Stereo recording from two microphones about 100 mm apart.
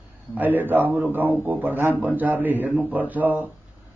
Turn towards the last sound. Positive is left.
turn(degrees=-15)  # may be behind; listen again after turning